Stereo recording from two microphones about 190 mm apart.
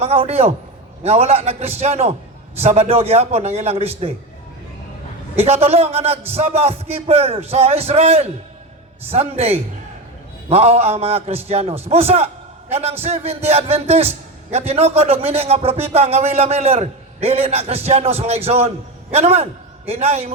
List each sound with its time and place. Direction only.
0.0 s a man's voice: 30° right (ahead or behind)
5.4 s a man's voice: 30° right (ahead or behind)